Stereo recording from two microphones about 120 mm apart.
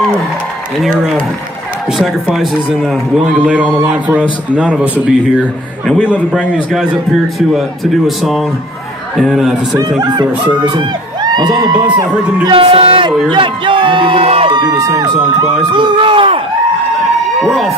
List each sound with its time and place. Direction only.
2.0 s speech: 5° right (ahead or behind)
9.8 s speech: 35° right (ahead or behind)
12.4 s a man's voice: 50° right (ahead or behind)
14.6 s a man's voice: 35° right (ahead or behind)
17.4 s speech: centre (ahead or behind)